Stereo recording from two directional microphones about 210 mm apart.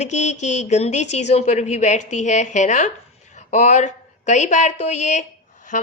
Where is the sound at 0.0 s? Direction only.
35° left (ahead or behind).